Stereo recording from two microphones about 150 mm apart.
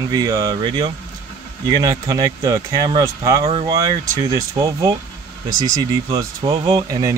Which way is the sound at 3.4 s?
40° right (ahead or behind).